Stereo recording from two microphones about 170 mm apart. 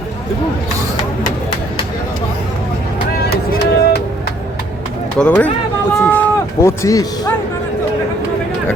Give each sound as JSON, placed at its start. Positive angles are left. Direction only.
{"t": 3.2, "sound": "music", "side_deg": 75}
{"t": 5.1, "sound": "speech", "side_deg": 5}